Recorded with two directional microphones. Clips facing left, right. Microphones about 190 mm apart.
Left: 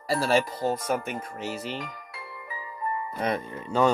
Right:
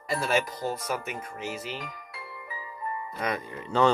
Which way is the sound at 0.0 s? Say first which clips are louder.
Left 3 dB; 35° left (ahead or behind).